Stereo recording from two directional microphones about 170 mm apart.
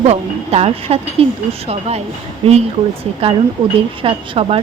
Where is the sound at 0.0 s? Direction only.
40° right (ahead or behind).